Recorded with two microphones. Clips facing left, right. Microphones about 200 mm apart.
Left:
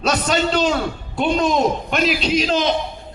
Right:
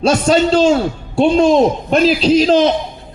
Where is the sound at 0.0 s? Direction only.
30° right (ahead or behind).